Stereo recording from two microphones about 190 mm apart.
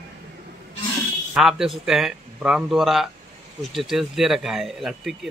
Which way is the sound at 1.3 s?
Centre (ahead or behind).